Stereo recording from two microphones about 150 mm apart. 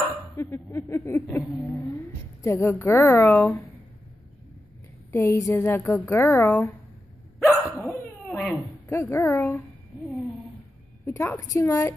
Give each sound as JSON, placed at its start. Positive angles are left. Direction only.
{"t": 0.4, "sound": "speech", "side_deg": 20}
{"t": 2.4, "sound": "a woman's voice", "side_deg": 20}
{"t": 5.1, "sound": "a woman's voice", "side_deg": 20}
{"t": 7.3, "sound": "hiccup", "side_deg": 0}
{"t": 8.8, "sound": "a woman's voice", "side_deg": 20}
{"t": 11.1, "sound": "a woman's voice", "side_deg": 20}